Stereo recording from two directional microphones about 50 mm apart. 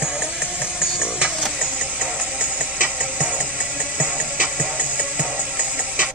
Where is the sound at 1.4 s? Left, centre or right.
Centre.